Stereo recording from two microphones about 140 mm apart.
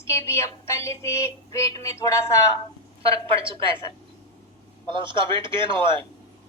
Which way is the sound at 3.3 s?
40° right (ahead or behind).